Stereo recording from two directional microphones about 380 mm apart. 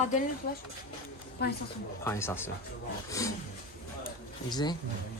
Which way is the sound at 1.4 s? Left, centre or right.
Left.